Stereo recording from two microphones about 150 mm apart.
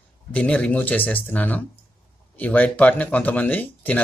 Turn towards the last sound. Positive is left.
turn(degrees=10)  # may be behind; listen again after turning